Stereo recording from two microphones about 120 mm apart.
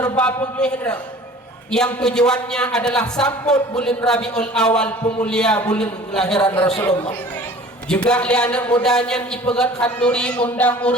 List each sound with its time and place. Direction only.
0.2 s a man's voice: 10° left (ahead or behind)
7.9 s a man's voice: 10° left (ahead or behind)